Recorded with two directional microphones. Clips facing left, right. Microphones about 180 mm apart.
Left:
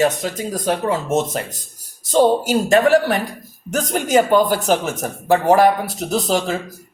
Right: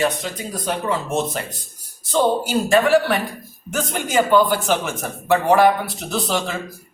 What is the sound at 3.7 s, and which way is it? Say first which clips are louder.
A man's voice: left 6 dB; 40° left (ahead or behind).